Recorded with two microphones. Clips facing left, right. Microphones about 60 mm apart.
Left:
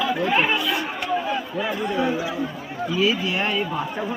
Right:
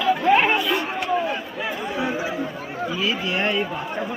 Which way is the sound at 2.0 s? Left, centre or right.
Right.